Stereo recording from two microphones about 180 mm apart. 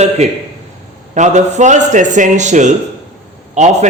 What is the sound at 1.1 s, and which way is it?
A man's voice, 40° right (ahead or behind).